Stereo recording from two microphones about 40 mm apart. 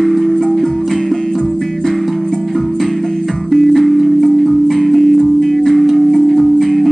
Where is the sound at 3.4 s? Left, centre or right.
Centre.